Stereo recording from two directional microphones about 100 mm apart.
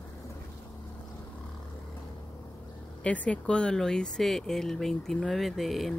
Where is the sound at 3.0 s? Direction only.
15° left (ahead or behind).